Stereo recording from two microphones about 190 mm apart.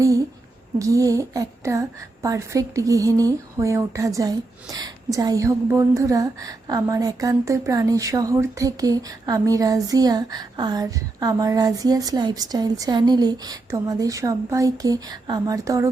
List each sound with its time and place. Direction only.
0.8 s a woman's voice: 15° right (ahead or behind)